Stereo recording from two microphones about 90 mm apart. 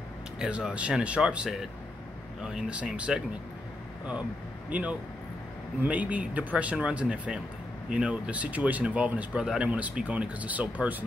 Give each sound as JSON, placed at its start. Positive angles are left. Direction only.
{"t": 0.4, "sound": "speech", "side_deg": -10}
{"t": 4.6, "sound": "speech", "side_deg": -15}